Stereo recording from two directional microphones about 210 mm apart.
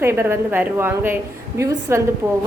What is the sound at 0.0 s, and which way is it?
A woman's voice, 10° right (ahead or behind).